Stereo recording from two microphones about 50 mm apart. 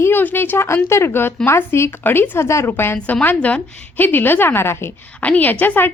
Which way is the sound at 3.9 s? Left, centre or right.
Left.